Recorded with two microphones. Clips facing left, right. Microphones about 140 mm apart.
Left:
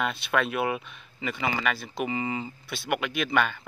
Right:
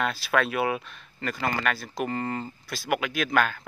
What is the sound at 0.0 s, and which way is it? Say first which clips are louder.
Speech: right 1 dB; centre (ahead or behind).